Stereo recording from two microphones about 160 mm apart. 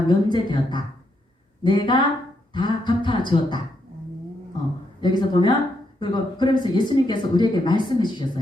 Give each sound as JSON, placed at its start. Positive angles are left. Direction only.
{"t": 0.1, "sound": "speech", "side_deg": 30}
{"t": 4.9, "sound": "speech", "side_deg": 30}